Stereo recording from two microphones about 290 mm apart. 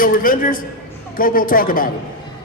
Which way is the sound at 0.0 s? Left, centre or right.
Left.